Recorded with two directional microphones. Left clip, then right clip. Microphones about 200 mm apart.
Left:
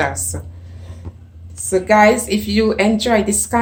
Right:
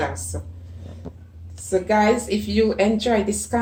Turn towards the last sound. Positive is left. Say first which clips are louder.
# left 5 dB
turn(degrees=25)  # may be behind; listen again after turning